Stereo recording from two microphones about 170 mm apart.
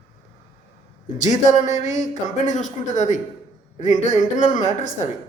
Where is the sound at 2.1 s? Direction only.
45° left (ahead or behind).